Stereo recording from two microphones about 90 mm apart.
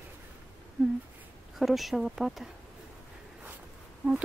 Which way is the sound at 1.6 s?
Centre (ahead or behind).